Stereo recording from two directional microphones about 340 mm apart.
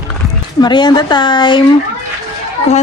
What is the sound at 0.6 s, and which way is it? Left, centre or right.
A woman's voice, centre.